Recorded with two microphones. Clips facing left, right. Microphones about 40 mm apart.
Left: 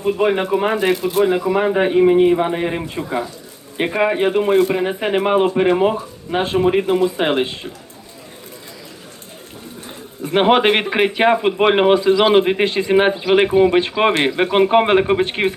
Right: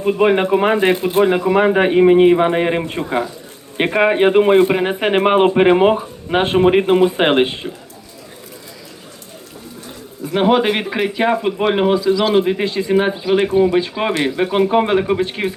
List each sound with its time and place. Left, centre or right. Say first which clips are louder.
0.1 s speech: right 3 dB; centre; by 7.5 s right
10.2 s a man's voice: left 1 dB; left